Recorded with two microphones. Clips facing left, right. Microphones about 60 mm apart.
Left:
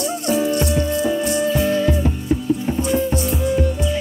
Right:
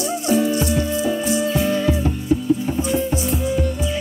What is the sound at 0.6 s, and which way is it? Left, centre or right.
Music, centre.